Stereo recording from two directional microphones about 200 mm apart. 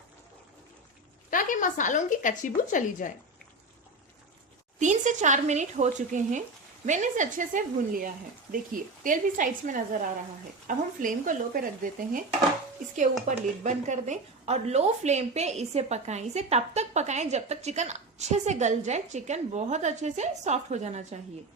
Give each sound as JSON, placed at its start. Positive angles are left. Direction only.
{"t": 1.3, "sound": "speech", "side_deg": 40}
{"t": 4.8, "sound": "a woman's voice", "side_deg": -40}
{"t": 13.2, "sound": "a woman's voice", "side_deg": -35}